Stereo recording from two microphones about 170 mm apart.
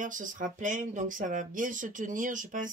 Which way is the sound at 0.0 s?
50° right (ahead or behind).